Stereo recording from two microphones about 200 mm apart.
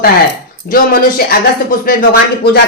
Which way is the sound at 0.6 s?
45° left (ahead or behind).